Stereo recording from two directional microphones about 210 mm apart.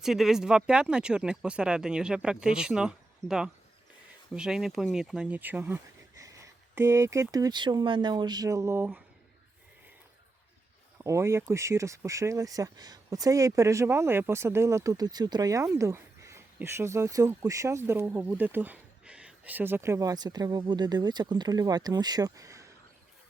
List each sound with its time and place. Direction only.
0.0 s speech: centre (ahead or behind)
10.9 s speech: 15° right (ahead or behind)